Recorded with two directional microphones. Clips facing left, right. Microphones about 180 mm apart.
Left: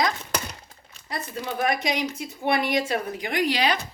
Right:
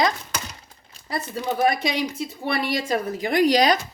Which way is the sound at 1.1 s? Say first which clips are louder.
Right 4 dB; 35° right (ahead or behind).